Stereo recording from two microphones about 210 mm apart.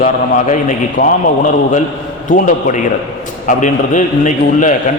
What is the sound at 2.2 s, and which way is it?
A man's voice, 35° left (ahead or behind).